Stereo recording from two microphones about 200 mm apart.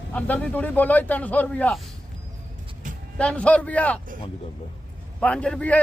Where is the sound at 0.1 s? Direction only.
5° left (ahead or behind).